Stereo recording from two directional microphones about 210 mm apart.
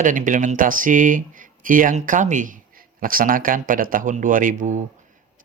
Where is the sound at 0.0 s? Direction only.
40° right (ahead or behind).